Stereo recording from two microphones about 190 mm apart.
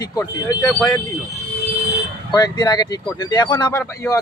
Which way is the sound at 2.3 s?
20° left (ahead or behind).